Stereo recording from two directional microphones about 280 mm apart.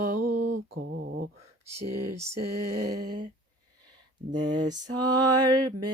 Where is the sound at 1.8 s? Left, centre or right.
Right.